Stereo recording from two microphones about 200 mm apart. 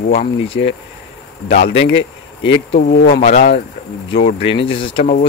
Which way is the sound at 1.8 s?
70° left (ahead or behind).